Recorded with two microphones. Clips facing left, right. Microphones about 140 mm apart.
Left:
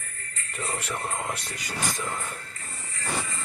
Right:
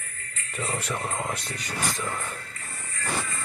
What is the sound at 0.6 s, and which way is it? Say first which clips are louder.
Speech: right 2 dB; centre (ahead or behind).